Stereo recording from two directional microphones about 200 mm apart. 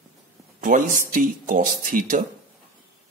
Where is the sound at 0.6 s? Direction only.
45° right (ahead or behind).